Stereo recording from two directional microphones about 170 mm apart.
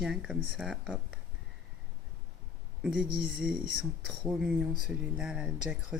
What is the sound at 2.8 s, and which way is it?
Speech, 5° right (ahead or behind).